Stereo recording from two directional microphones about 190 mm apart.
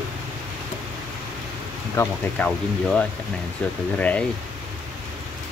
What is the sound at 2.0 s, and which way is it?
Speech, 5° left (ahead or behind).